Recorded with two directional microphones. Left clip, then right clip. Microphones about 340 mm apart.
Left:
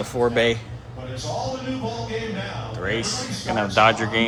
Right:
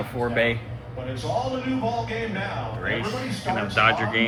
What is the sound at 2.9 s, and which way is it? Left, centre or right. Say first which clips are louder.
A man's voice: left 2 dB; centre.